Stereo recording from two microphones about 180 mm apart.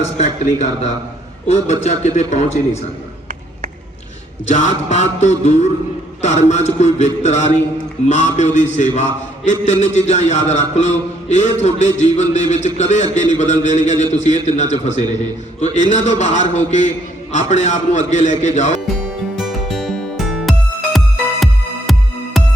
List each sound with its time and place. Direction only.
0.0 s a man's voice: 40° left (ahead or behind)
4.4 s a man's voice: 40° left (ahead or behind)
19.4 s music: centre (ahead or behind)